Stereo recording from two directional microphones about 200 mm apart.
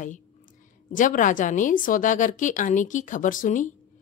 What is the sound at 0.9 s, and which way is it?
A woman's voice, 40° left (ahead or behind).